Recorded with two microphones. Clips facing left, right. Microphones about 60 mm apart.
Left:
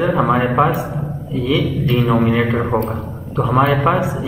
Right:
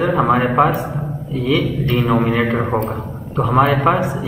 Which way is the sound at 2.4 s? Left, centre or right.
Centre.